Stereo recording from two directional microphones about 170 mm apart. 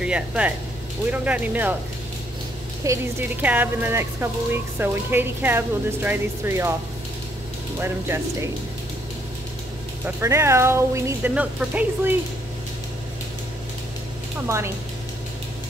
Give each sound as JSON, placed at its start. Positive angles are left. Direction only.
{"t": 0.0, "sound": "speech", "side_deg": -5}
{"t": 2.8, "sound": "speech", "side_deg": -15}
{"t": 7.8, "sound": "speech", "side_deg": -15}
{"t": 10.0, "sound": "speech", "side_deg": -15}